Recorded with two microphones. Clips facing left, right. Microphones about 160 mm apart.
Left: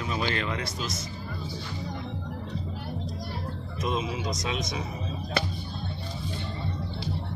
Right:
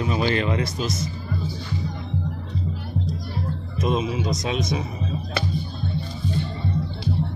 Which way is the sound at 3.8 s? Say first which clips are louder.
Right 6 dB; 20° right (ahead or behind).